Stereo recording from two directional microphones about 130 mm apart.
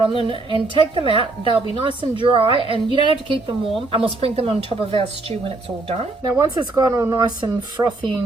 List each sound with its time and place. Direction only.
0.2 s a woman's voice: 40° right (ahead or behind)
6.2 s speech: 25° right (ahead or behind)